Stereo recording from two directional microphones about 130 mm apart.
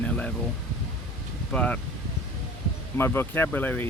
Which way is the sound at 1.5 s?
10° left (ahead or behind).